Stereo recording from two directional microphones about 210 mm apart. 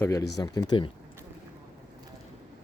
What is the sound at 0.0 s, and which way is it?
Speech, 15° left (ahead or behind).